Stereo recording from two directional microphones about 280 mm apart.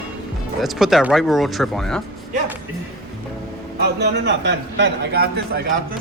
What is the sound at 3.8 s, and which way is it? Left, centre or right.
A man's voice, right.